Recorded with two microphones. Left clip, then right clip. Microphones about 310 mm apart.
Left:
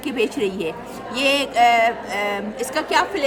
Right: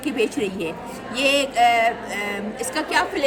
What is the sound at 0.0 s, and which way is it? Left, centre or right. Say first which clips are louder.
Speech: left 1 dB; centre.